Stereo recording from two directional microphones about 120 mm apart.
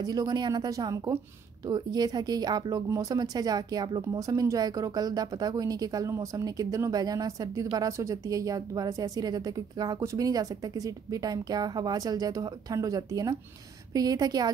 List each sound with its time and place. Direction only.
0.0 s speech: 35° right (ahead or behind)